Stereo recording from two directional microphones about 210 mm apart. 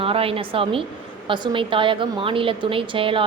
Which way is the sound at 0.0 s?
25° right (ahead or behind).